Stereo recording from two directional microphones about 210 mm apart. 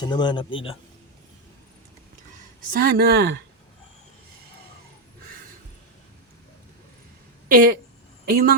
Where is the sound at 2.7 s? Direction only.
45° right (ahead or behind).